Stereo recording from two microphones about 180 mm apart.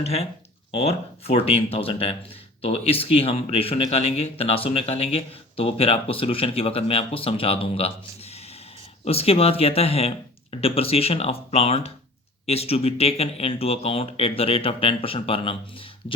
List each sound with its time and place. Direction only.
0.0 s speech: 35° left (ahead or behind)